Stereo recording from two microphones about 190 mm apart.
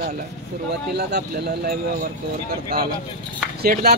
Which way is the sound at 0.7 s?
60° right (ahead or behind).